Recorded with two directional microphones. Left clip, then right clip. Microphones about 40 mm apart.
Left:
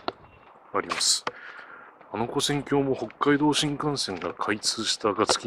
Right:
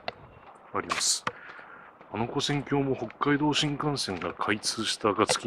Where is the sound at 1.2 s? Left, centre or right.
Centre.